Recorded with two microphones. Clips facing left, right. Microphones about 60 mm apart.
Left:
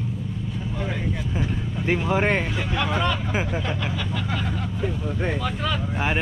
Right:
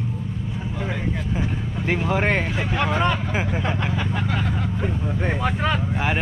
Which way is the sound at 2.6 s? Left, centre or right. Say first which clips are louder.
Right 2 dB; right.